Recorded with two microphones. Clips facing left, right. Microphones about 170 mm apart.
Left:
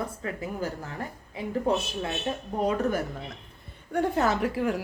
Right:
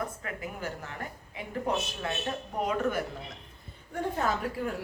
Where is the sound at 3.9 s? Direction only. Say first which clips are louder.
Left 5 dB; 75° left (ahead or behind).